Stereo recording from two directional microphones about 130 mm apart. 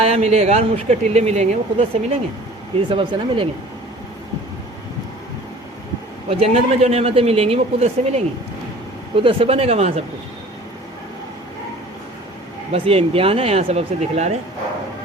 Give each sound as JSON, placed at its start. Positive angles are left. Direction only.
{"t": 0.0, "sound": "speech", "side_deg": -55}
{"t": 2.9, "sound": "a man's voice", "side_deg": -45}
{"t": 6.2, "sound": "a man's voice", "side_deg": -50}
{"t": 12.7, "sound": "a man's voice", "side_deg": -50}